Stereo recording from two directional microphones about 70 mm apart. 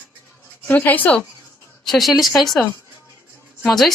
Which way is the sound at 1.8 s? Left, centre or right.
Centre.